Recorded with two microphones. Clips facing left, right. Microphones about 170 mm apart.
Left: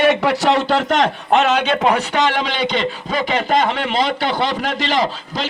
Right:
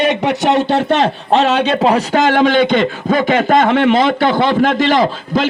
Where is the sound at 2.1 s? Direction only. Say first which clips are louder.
Right 7 dB; 50° right (ahead or behind).